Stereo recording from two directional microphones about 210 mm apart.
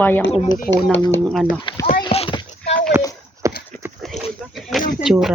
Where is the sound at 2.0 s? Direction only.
25° left (ahead or behind).